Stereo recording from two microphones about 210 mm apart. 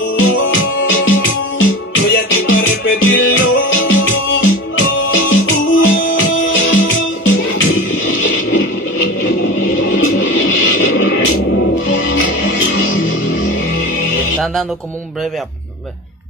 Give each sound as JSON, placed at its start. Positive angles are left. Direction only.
{"t": 0.2, "sound": "music", "side_deg": 70}